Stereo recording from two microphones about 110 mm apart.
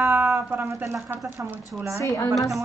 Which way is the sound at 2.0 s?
25° left (ahead or behind).